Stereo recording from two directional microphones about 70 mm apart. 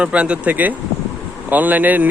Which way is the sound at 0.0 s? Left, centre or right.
Centre.